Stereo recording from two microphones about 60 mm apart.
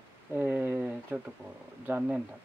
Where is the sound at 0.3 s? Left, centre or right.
Right.